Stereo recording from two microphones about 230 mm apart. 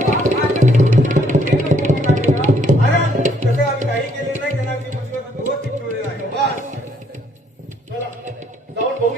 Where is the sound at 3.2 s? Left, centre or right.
Right.